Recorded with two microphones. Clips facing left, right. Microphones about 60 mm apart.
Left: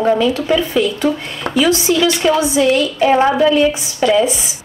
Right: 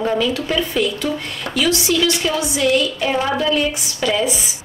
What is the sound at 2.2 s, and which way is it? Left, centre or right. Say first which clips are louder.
Speech: left 6 dB; left.